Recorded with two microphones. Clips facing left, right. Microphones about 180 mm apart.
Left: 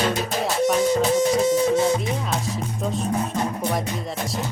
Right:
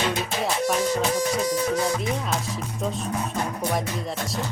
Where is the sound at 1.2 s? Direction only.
25° left (ahead or behind).